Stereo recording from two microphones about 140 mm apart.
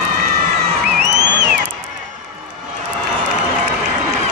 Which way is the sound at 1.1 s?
25° right (ahead or behind).